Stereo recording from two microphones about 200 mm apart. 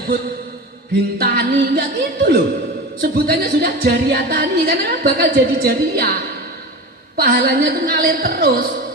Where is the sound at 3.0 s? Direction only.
50° right (ahead or behind).